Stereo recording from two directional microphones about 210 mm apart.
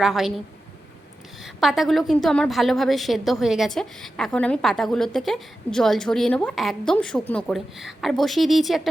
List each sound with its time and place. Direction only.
0.0 s a woman's voice: centre (ahead or behind)